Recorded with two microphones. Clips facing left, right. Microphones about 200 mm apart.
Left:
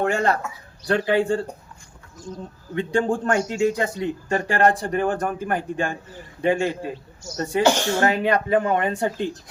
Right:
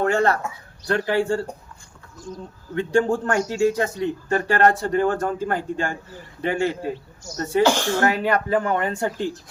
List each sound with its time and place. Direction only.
0.0 s speech: 15° left (ahead or behind)
2.7 s a man's voice: 20° left (ahead or behind)